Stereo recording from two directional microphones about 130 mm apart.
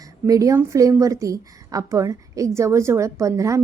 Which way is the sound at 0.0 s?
25° right (ahead or behind).